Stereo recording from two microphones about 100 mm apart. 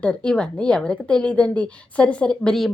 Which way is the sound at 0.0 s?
10° left (ahead or behind).